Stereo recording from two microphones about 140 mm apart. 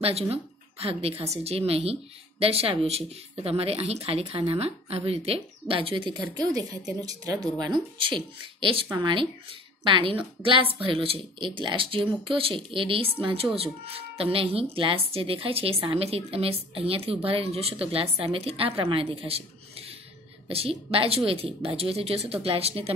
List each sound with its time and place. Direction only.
0.0 s a woman's voice: 45° right (ahead or behind)